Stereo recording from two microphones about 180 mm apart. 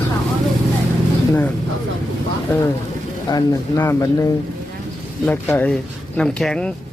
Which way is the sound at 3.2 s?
20° left (ahead or behind).